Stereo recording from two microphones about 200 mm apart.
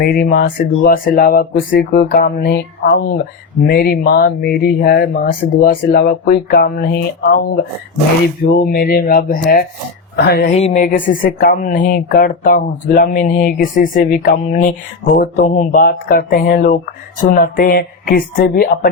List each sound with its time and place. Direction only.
0.0 s speech: 50° left (ahead or behind)
1.7 s speech: 60° left (ahead or behind)
8.4 s speech: 50° left (ahead or behind)
10.5 s speech: 35° left (ahead or behind)